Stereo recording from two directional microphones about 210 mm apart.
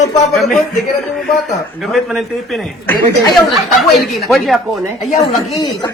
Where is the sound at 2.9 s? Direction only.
Centre (ahead or behind).